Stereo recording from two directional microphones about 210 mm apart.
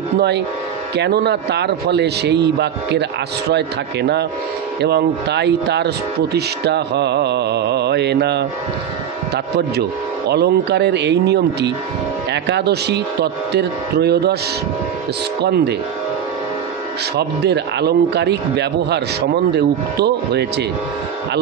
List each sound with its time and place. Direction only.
0.9 s speech: 50° right (ahead or behind)
15.4 s speech: 50° right (ahead or behind)
17.2 s speech: 50° right (ahead or behind)